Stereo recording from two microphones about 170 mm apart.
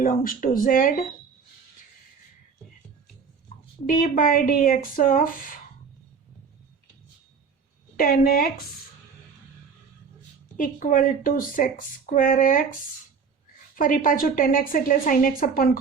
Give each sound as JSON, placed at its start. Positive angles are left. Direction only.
{"t": 0.0, "sound": "a woman's voice", "side_deg": 55}
{"t": 3.8, "sound": "a woman's voice", "side_deg": 55}
{"t": 7.9, "sound": "a woman's voice", "side_deg": 60}
{"t": 10.6, "sound": "a woman's voice", "side_deg": 55}
{"t": 13.7, "sound": "a woman's voice", "side_deg": 55}